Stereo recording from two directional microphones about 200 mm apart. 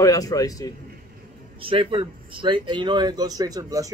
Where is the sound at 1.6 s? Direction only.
25° right (ahead or behind).